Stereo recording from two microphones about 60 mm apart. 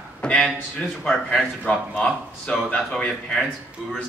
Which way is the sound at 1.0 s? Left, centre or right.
Centre.